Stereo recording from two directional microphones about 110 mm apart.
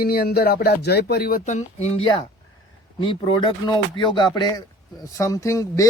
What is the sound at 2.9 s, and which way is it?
A man's voice, 45° left (ahead or behind).